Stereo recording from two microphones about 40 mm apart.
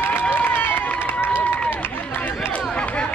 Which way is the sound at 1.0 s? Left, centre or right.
Left.